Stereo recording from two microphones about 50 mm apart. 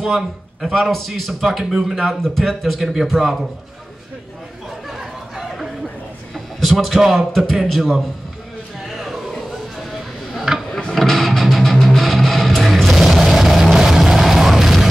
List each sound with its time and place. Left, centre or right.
0.0 s a man's voice: centre
4.8 s chatter: centre
6.3 s a sound: centre
7.3 s a man's voice: centre
8.8 s a sound: centre
11.0 s music: centre